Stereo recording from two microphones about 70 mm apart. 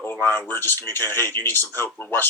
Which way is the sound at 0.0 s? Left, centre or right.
Left.